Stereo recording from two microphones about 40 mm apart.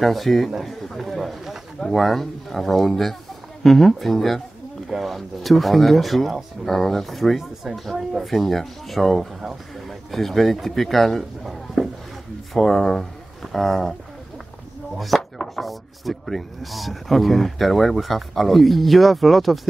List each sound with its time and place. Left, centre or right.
0.0 s speech: centre
11.8 s a sound: centre
12.5 s speech: centre
15.0 s speech: centre